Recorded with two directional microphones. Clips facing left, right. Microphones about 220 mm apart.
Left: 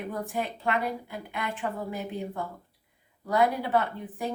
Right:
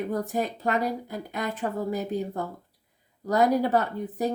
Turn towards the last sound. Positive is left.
turn(degrees=-40)  # may be behind; listen again after turning